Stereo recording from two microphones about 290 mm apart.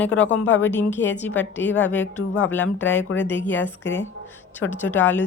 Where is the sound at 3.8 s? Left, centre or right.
Left.